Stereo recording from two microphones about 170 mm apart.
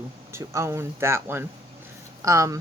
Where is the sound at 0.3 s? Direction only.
15° right (ahead or behind).